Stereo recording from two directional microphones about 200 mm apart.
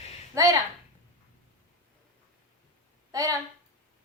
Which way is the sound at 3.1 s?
15° right (ahead or behind).